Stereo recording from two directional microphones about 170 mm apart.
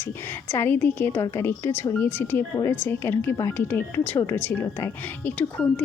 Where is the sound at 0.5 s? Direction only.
10° left (ahead or behind).